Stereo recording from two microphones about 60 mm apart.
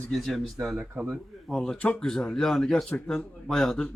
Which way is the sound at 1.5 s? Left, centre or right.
Centre.